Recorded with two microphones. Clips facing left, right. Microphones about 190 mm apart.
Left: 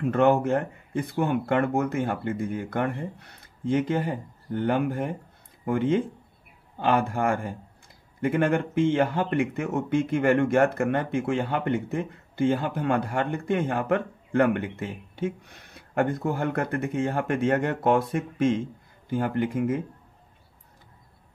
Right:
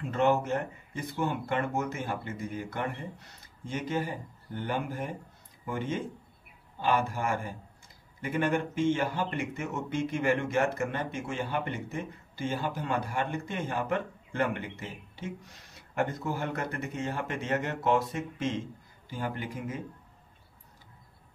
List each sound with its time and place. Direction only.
0.0 s speech: 55° left (ahead or behind)